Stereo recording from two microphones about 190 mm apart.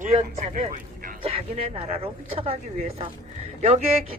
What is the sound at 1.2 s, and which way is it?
A man's voice, 30° right (ahead or behind).